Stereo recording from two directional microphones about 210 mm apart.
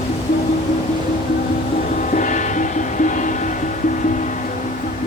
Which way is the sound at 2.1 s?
35° left (ahead or behind).